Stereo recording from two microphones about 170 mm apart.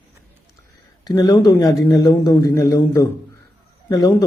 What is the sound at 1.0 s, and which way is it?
A man's voice, 20° left (ahead or behind).